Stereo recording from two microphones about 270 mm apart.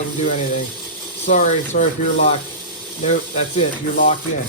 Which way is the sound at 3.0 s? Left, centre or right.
Left.